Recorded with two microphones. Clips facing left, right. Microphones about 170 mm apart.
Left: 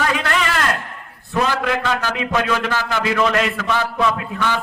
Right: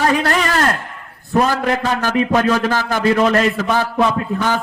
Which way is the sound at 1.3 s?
40° right (ahead or behind).